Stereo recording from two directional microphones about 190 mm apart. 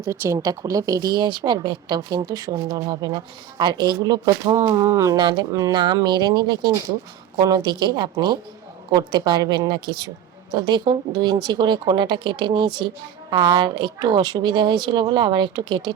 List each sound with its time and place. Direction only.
0.0 s speech: 15° right (ahead or behind)